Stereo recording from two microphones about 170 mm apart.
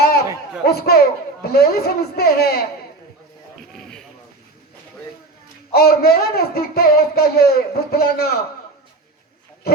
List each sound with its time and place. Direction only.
0.0 s a sound: 65° left (ahead or behind)
0.6 s a man's voice: 70° left (ahead or behind)
3.7 s vehicle: 5° left (ahead or behind)
5.7 s speech: 65° left (ahead or behind)